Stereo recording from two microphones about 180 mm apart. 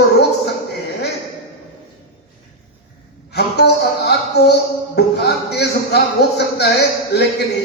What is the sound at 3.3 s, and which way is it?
A woman's voice, 65° left (ahead or behind).